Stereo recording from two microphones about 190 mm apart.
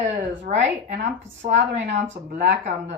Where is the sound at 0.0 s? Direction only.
40° right (ahead or behind).